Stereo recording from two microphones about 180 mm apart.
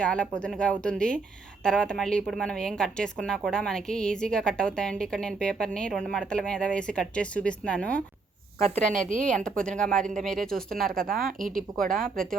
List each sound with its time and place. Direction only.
0.0 s a woman's voice: 5° left (ahead or behind)
8.6 s speech: 40° right (ahead or behind)
9.4 s a woman's voice: 5° left (ahead or behind)
10.8 s speech: 50° right (ahead or behind)